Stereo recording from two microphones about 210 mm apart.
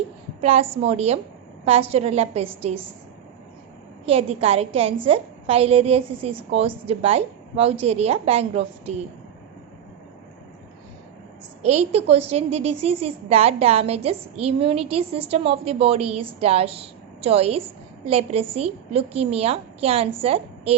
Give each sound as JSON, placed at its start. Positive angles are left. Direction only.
{"t": 0.4, "sound": "a woman's voice", "side_deg": -30}
{"t": 4.0, "sound": "a woman's voice", "side_deg": -30}
{"t": 11.6, "sound": "a woman's voice", "side_deg": -30}